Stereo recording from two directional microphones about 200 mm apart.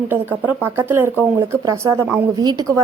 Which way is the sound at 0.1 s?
10° right (ahead or behind).